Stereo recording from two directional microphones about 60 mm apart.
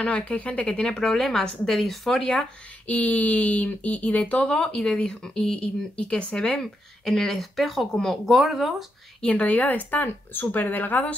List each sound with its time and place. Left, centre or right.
0.0 s speech: centre
2.9 s speech: left; by 8.8 s centre
9.2 s speech: left